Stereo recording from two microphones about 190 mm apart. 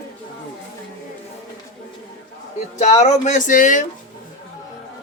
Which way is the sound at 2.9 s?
35° left (ahead or behind).